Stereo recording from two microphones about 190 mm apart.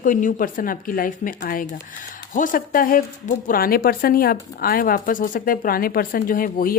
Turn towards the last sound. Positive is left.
turn(degrees=50)  # may be behind; listen again after turning